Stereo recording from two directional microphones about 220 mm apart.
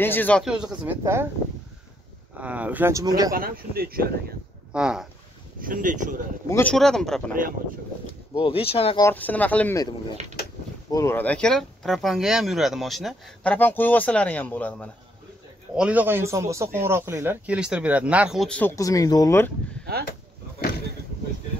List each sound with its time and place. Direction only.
0.0 s speech: 10° left (ahead or behind); by 1.3 s 10° right (ahead or behind)
2.3 s speech: 5° right (ahead or behind)
3.3 s speech: 40° right (ahead or behind)
4.7 s speech: 5° right (ahead or behind)
5.6 s speech: 40° right (ahead or behind)
6.5 s speech: 5° left (ahead or behind)
8.4 s speech: 25° left (ahead or behind)
9.0 s speech: 5° left (ahead or behind)
15.7 s speech: 5° right (ahead or behind)
18.8 s speech: 15° left (ahead or behind)